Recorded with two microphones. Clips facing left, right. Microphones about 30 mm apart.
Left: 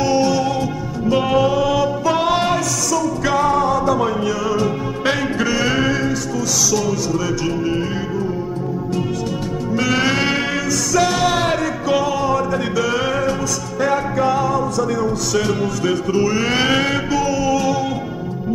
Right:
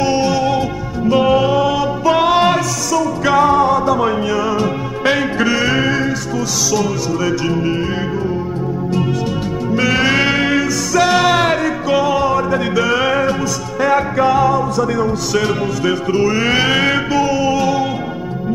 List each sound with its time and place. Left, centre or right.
0.0 s music: centre
9.8 s music: centre